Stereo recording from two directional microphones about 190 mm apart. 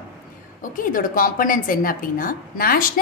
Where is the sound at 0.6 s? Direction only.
45° left (ahead or behind).